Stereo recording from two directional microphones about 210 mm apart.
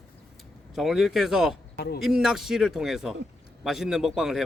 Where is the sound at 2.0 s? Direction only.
5° right (ahead or behind).